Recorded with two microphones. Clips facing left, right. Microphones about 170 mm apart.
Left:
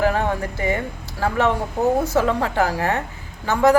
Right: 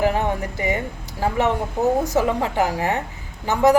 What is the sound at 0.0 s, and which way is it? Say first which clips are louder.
Speech: even; 15° right (ahead or behind).